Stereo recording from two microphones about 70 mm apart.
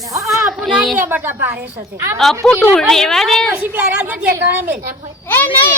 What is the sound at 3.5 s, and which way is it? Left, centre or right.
Speech, right.